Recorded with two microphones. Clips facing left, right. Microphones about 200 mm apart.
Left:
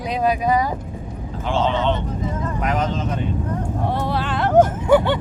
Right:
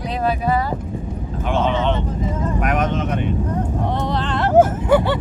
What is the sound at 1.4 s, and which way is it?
Vehicle, 20° right (ahead or behind).